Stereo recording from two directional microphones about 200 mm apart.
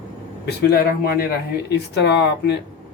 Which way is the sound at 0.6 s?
50° left (ahead or behind).